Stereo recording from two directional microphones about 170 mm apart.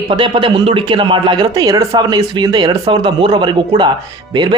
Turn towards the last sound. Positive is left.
turn(degrees=-25)  # may be behind; listen again after turning